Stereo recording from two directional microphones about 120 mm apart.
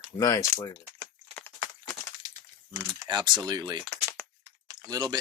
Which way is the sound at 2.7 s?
35° right (ahead or behind).